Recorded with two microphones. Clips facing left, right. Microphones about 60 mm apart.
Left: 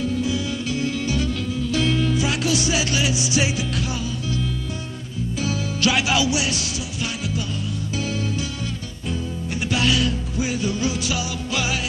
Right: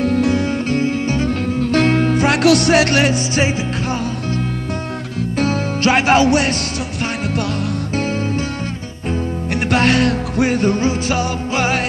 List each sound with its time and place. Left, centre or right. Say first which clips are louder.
0.0 s music: right 8 dB; right
5.4 s music: right 6 dB; right
9.7 s music: right 7 dB; right